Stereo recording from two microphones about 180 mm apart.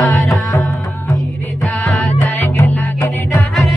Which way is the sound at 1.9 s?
5° left (ahead or behind).